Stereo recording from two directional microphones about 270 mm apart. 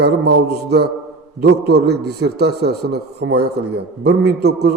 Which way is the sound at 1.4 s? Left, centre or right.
Right.